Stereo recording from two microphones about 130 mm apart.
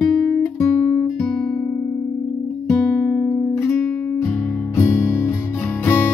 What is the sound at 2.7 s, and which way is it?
Guitar, 20° left (ahead or behind).